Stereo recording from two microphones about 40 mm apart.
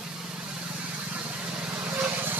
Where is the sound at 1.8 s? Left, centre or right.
Right.